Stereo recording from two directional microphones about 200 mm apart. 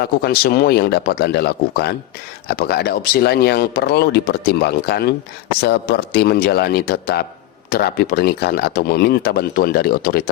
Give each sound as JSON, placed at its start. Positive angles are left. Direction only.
{"t": 0.0, "sound": "a man's voice", "side_deg": 50}